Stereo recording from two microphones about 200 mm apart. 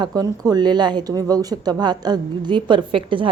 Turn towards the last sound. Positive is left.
turn(degrees=-25)  # may be behind; listen again after turning